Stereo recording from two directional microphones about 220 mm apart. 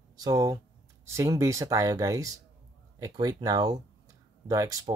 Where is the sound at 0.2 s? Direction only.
15° right (ahead or behind).